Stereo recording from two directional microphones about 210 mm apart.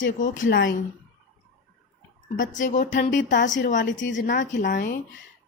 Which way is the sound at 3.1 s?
60° left (ahead or behind).